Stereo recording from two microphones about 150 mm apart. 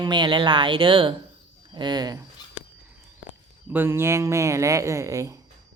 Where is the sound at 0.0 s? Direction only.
30° right (ahead or behind).